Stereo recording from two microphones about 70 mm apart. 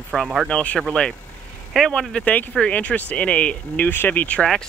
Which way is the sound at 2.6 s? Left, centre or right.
Centre.